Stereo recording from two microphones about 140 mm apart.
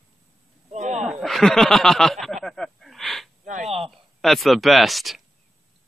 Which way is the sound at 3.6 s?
45° right (ahead or behind).